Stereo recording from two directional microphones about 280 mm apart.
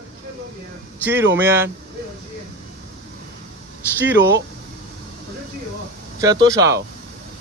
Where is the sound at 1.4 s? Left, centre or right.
Centre.